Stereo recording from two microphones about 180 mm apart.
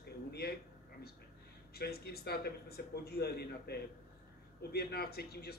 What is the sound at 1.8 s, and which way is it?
A man's voice, 60° left (ahead or behind).